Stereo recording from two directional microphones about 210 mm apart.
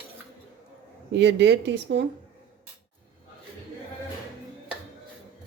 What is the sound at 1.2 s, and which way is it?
Speech, 55° right (ahead or behind).